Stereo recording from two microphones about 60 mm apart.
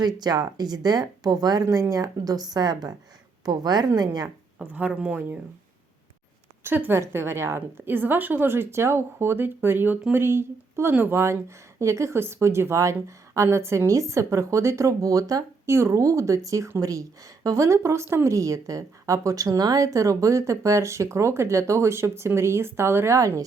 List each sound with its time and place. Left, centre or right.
0.3 s speech: right
1.7 s speech: right
4.9 s speech: centre
6.7 s a woman's voice: right
6.9 s a woman's voice: right
10.9 s a woman's voice: right
11.2 s a woman's voice: right
15.6 s a woman's voice: right
16.8 s a woman's voice: right